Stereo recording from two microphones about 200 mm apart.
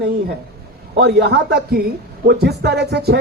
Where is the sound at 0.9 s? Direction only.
55° right (ahead or behind).